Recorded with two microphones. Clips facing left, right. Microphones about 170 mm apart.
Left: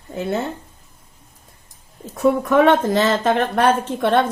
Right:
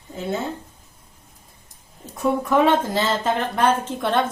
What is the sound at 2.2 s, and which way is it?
A woman's voice, 70° left (ahead or behind).